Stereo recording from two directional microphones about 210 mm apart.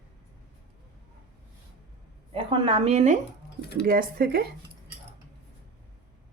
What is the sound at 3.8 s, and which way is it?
Speech, 45° right (ahead or behind).